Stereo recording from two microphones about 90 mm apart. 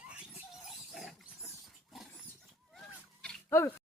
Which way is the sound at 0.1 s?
15° right (ahead or behind).